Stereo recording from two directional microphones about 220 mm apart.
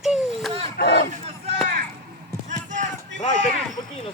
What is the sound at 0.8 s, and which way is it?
Crowd, 45° left (ahead or behind).